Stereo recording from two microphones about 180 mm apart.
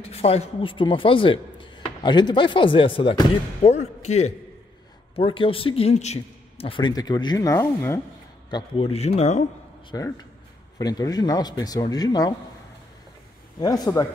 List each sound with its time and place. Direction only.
0.1 s speech: 35° left (ahead or behind); by 8.0 s 15° left (ahead or behind)
8.5 s a man's voice: 25° left (ahead or behind)
9.8 s speech: 20° left (ahead or behind)
13.6 s speech: 20° left (ahead or behind)